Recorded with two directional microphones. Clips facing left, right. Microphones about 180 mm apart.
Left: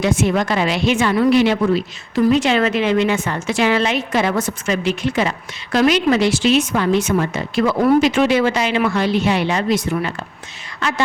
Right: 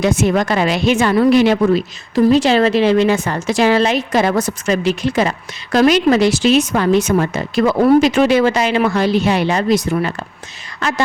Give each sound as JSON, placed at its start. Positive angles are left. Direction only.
{"t": 0.0, "sound": "a woman's voice", "side_deg": -40}